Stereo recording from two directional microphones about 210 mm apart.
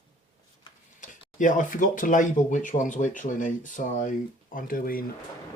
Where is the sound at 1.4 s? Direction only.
40° left (ahead or behind).